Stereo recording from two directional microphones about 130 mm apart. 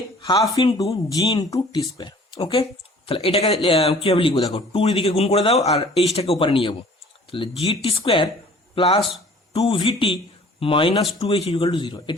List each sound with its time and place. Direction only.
0.2 s a man's voice: 30° left (ahead or behind)